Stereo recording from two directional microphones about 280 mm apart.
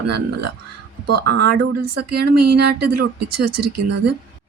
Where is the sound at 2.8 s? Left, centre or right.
Right.